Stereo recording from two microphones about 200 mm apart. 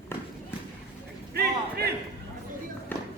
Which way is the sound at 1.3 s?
50° right (ahead or behind).